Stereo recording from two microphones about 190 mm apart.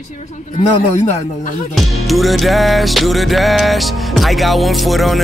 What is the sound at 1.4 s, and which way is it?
Speech, 40° left (ahead or behind).